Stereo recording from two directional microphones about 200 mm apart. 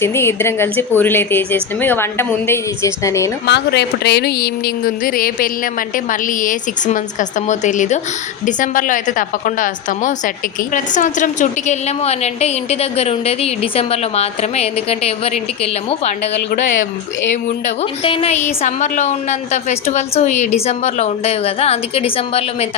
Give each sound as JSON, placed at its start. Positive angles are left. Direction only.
{"t": 0.0, "sound": "speech", "side_deg": 10}
{"t": 3.4, "sound": "a woman's voice", "side_deg": 55}
{"t": 18.0, "sound": "a woman's voice", "side_deg": 30}